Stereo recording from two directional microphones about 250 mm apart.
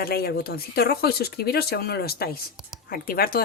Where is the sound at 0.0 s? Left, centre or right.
Left.